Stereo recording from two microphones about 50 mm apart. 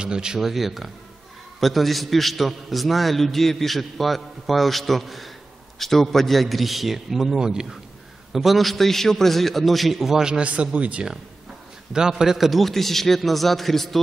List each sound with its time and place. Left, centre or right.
0.0 s a man's voice: centre
10.4 s a man's voice: right
11.9 s a man's voice: centre